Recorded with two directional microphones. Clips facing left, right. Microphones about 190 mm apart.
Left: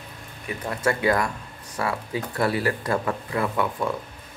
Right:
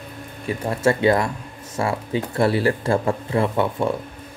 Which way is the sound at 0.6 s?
25° right (ahead or behind).